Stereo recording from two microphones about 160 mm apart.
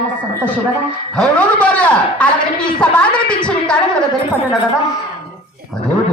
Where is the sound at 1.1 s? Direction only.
10° left (ahead or behind).